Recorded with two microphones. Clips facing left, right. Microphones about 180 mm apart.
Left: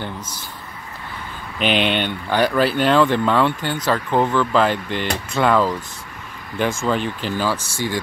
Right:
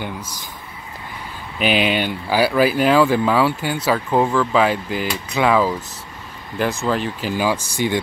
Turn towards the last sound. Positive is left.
turn(degrees=-20)  # may be behind; listen again after turning